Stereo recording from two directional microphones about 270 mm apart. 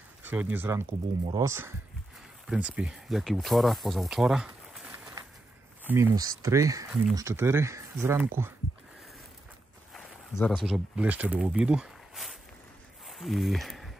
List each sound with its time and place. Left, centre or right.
0.3 s speech: centre
5.9 s speech: centre
9.9 s speech: centre
13.0 s a sound: centre